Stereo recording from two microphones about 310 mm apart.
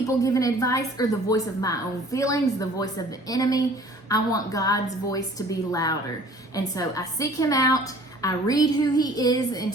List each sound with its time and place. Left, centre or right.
0.1 s a woman's voice: centre